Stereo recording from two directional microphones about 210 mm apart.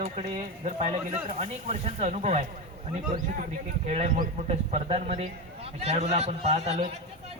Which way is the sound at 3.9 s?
35° right (ahead or behind).